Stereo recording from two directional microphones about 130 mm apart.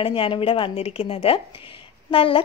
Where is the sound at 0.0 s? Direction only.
45° left (ahead or behind).